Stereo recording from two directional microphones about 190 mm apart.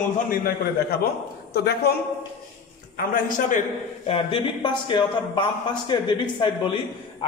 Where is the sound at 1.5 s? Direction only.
55° left (ahead or behind).